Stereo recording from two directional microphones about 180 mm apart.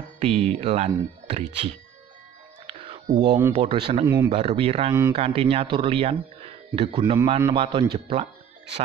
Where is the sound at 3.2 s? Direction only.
25° right (ahead or behind).